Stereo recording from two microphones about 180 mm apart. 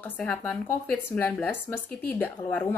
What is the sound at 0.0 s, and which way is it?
A woman's voice, 10° left (ahead or behind).